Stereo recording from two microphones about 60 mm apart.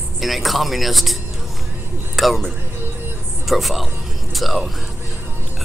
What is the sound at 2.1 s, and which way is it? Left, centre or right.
Speech, centre.